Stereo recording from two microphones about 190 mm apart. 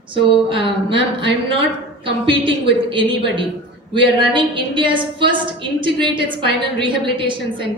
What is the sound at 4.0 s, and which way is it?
A woman's voice, 25° right (ahead or behind).